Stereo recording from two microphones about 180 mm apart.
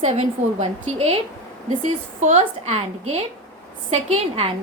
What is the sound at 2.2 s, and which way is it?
A woman's voice, 40° right (ahead or behind).